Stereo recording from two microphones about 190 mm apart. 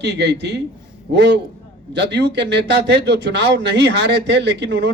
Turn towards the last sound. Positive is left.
turn(degrees=-65)  # may be behind; listen again after turning